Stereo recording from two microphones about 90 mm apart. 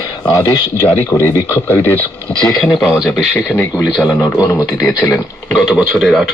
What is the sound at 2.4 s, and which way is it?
Speech, 5° left (ahead or behind).